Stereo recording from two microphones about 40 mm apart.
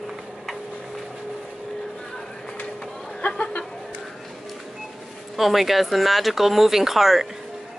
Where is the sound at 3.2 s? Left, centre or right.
Left.